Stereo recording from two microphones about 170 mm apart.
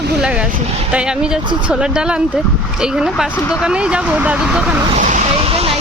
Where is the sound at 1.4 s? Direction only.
25° right (ahead or behind).